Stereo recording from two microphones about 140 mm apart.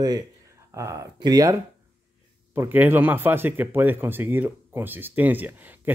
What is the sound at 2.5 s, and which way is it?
Speech, 15° right (ahead or behind).